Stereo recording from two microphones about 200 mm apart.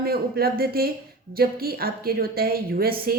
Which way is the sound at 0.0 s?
50° right (ahead or behind).